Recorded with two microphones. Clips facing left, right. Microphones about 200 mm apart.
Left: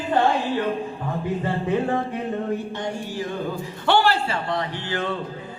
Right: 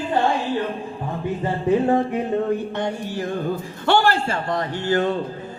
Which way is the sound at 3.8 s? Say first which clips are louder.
Right 1 dB; 45° right (ahead or behind).